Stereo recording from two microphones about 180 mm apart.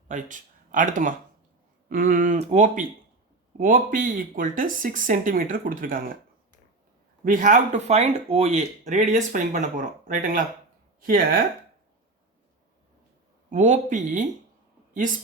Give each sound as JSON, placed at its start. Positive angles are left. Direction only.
{"t": 0.1, "sound": "speech", "side_deg": -45}
{"t": 7.3, "sound": "speech", "side_deg": -45}
{"t": 13.5, "sound": "speech", "side_deg": -45}